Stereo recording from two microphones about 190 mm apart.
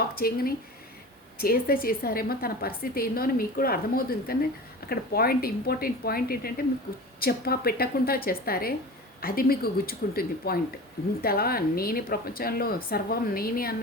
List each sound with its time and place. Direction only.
0.2 s a woman's voice: 50° left (ahead or behind)